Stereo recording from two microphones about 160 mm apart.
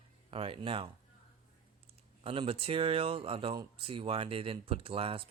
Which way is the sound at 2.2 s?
35° right (ahead or behind).